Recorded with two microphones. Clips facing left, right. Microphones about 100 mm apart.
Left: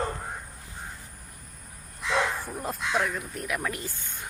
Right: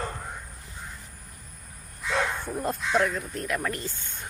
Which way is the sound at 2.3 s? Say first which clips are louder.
Right 3 dB; 5° left (ahead or behind).